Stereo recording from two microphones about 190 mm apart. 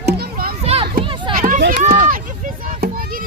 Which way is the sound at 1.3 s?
45° right (ahead or behind).